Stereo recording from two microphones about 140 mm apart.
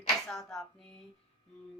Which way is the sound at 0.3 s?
5° left (ahead or behind).